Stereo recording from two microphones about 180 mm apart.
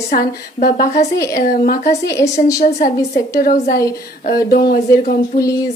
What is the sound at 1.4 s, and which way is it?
A woman's voice, 50° left (ahead or behind).